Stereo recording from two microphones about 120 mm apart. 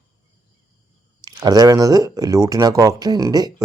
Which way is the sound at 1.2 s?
35° right (ahead or behind).